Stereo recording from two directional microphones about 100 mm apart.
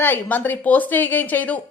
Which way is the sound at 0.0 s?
20° left (ahead or behind).